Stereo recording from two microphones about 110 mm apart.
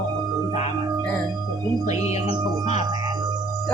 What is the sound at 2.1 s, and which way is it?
Music, 75° left (ahead or behind).